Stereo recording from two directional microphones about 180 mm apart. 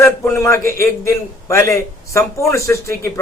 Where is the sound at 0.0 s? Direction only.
15° left (ahead or behind).